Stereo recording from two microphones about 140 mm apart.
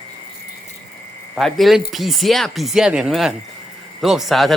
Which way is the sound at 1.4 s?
Centre (ahead or behind).